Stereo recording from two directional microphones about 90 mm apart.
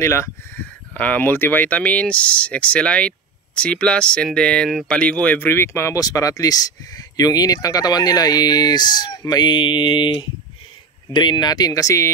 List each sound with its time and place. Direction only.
0.0 s speech: 30° left (ahead or behind)
0.9 s speech: 20° left (ahead or behind); by 12.1 s 40° left (ahead or behind)